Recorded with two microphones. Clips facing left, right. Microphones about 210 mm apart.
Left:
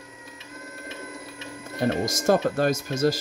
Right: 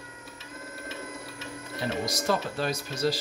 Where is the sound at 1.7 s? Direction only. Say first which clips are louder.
Left 6 dB; 50° left (ahead or behind).